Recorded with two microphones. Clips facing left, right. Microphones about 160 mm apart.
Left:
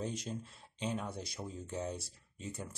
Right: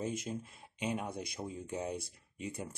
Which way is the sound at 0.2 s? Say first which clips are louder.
Right 2 dB; 10° right (ahead or behind).